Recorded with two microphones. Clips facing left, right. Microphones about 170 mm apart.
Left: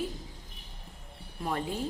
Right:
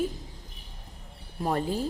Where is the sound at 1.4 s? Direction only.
40° right (ahead or behind).